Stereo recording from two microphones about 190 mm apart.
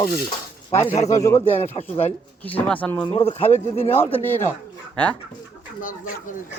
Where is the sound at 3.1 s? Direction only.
30° left (ahead or behind).